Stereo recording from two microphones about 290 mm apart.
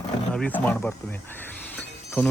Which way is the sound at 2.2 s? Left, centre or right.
Centre.